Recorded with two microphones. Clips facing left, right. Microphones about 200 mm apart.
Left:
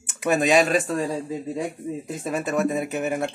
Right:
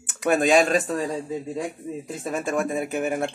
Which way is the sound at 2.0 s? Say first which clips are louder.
Even; 5° left (ahead or behind).